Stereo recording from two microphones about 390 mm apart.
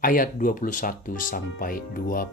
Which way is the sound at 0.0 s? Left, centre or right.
Left.